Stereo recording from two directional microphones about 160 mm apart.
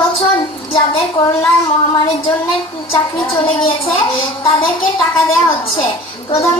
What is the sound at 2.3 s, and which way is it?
Speech, centre (ahead or behind).